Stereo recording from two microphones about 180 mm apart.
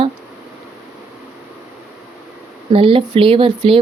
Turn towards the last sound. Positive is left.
turn(degrees=-30)  # may be behind; listen again after turning